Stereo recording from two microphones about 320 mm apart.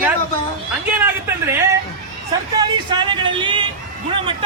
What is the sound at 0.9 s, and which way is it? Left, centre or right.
Speech, centre.